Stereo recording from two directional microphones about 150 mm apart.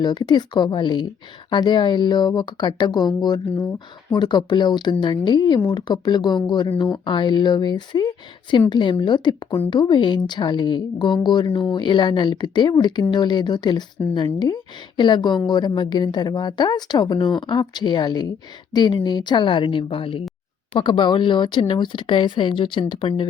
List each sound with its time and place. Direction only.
0.0 s speech: 30° left (ahead or behind)